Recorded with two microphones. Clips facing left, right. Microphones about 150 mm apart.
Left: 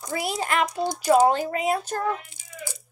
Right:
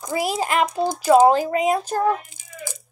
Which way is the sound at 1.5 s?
15° right (ahead or behind).